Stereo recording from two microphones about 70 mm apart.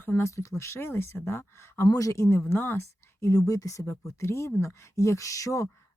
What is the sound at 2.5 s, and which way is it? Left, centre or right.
Speech, left.